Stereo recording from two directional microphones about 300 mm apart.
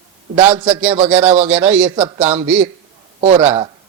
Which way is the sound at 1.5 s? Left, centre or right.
Centre.